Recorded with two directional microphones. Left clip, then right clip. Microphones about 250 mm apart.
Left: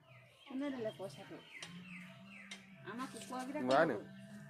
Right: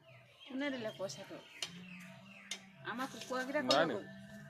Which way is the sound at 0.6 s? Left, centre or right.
Right.